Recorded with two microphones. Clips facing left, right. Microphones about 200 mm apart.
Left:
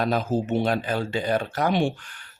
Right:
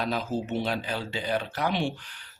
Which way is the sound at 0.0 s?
50° left (ahead or behind).